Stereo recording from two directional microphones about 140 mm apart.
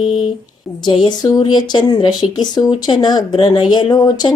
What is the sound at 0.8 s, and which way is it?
Speech, 35° left (ahead or behind).